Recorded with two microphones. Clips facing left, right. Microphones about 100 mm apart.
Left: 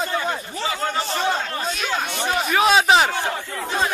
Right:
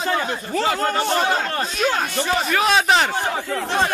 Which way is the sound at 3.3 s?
80° right.